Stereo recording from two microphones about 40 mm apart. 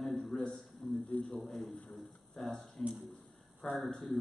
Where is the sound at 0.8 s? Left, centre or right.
Left.